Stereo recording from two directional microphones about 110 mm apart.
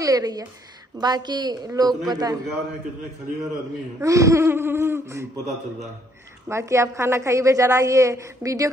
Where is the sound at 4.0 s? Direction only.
30° right (ahead or behind).